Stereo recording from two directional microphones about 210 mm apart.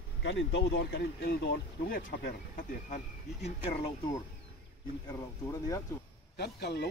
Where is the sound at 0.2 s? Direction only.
60° left (ahead or behind); by 3.8 s 30° left (ahead or behind).